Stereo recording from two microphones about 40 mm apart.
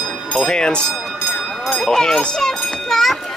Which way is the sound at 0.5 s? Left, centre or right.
Centre.